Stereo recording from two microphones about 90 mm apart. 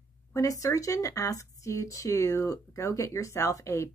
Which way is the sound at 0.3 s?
35° left (ahead or behind).